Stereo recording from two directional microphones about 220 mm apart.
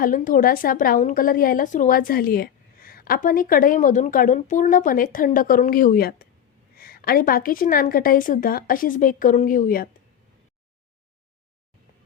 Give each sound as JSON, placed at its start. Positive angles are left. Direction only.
{"t": 0.0, "sound": "a woman's voice", "side_deg": 40}